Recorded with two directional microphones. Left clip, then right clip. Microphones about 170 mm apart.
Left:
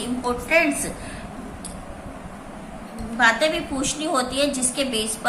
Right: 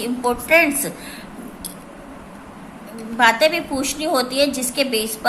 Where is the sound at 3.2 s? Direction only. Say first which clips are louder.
Right 4 dB; 40° right (ahead or behind).